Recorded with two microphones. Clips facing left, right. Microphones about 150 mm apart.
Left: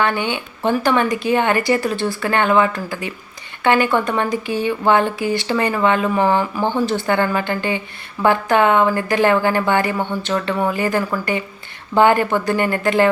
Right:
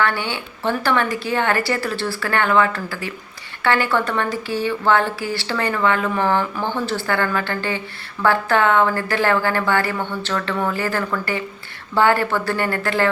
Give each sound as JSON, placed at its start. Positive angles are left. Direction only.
{"t": 0.0, "sound": "speech", "side_deg": 20}